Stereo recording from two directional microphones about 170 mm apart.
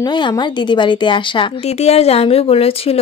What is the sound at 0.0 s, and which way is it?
A woman's voice, 25° left (ahead or behind).